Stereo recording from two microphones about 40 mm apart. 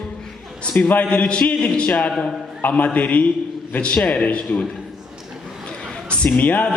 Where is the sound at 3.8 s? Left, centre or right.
Left.